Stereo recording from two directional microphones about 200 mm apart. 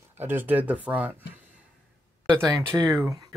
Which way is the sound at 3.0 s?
15° right (ahead or behind).